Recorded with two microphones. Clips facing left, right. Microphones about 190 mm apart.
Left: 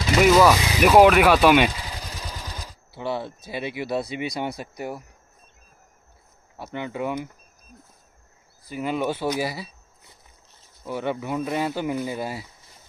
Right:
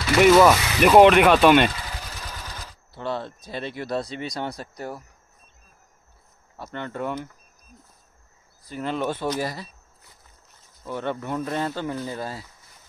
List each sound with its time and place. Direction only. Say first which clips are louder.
0.2 s speech: right 2 dB; 5° right (ahead or behind)
0.6 s speech: right 1 dB; 10° left (ahead or behind)
6.5 s speech: left 2 dB; 10° left (ahead or behind)
8.6 s speech: left 1 dB; 10° left (ahead or behind)
10.8 s speech: left 1 dB; 10° left (ahead or behind)